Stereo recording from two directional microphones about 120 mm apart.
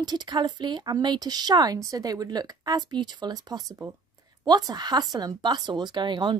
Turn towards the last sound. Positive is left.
turn(degrees=-40)  # may be behind; listen again after turning